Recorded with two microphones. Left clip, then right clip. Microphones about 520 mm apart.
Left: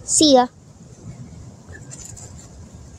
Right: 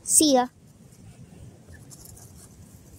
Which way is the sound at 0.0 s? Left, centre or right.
Right.